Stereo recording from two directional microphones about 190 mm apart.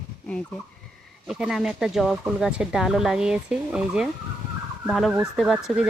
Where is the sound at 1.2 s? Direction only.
Centre (ahead or behind).